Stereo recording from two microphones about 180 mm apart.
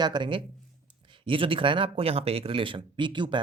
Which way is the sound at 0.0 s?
25° right (ahead or behind).